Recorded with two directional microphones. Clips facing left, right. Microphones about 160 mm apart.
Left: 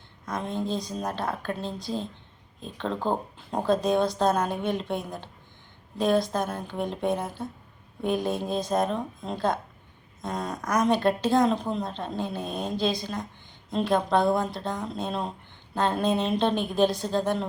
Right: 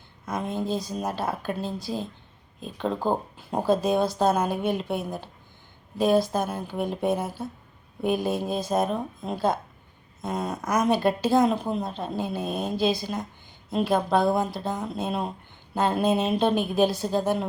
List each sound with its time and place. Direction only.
0.3 s a woman's voice: 5° right (ahead or behind)